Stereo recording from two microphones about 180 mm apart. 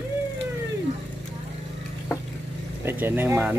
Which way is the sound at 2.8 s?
15° right (ahead or behind).